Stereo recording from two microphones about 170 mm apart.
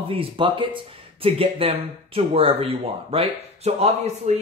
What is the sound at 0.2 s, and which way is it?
Speech, 30° right (ahead or behind).